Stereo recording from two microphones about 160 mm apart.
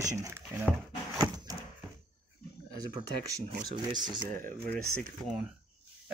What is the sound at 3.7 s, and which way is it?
Speech, 25° right (ahead or behind).